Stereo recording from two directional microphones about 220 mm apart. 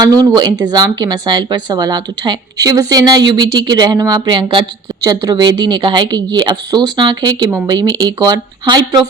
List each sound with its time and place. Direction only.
0.0 s a woman's voice: 15° right (ahead or behind)